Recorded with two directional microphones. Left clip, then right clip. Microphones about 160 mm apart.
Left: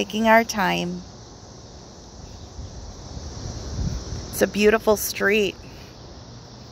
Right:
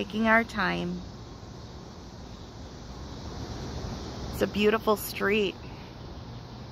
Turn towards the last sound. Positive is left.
turn(degrees=20)  # may be behind; listen again after turning